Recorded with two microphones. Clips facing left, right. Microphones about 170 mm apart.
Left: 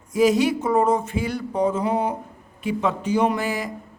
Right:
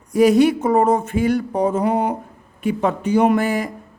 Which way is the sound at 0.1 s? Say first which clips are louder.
Right 5 dB; 60° right (ahead or behind).